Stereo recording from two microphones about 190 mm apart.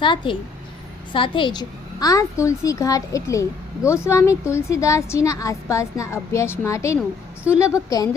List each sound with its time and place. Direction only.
0.0 s a child's voice: 25° left (ahead or behind)